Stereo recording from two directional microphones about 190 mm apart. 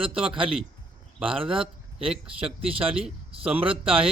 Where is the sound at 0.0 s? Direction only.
30° right (ahead or behind).